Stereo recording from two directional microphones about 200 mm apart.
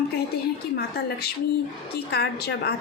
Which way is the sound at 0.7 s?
50° left (ahead or behind).